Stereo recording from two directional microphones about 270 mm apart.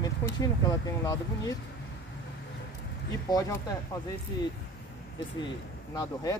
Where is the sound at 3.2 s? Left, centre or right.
Centre.